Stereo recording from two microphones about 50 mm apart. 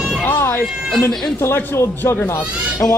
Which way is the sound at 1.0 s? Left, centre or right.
Left.